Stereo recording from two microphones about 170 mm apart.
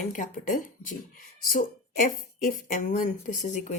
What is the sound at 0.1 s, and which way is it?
A woman's voice, 50° left (ahead or behind).